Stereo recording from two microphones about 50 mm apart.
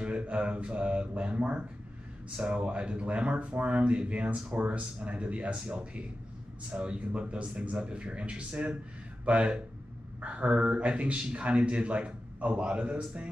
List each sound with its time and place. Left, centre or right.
0.0 s a man's voice: right